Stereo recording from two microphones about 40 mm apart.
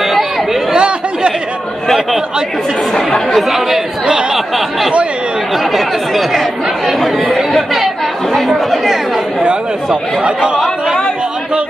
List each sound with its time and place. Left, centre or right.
0.0 s chatter: centre
0.7 s chatter: right
3.3 s speech: centre
4.0 s chatter: right
4.6 s chatter: centre
5.6 s speech: centre
6.9 s chatter: centre
8.5 s chatter: centre
10.2 s speech: right